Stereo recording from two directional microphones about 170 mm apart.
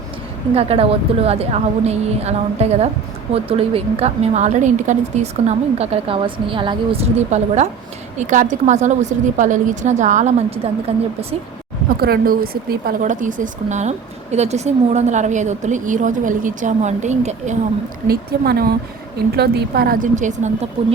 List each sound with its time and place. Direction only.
0.5 s a woman's voice: 35° right (ahead or behind)
11.9 s speech: 65° right (ahead or behind); by 17.6 s 45° right (ahead or behind)
18.1 s a woman's voice: 65° right (ahead or behind); by 20.7 s 45° right (ahead or behind)